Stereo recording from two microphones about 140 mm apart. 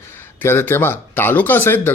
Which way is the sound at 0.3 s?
15° left (ahead or behind).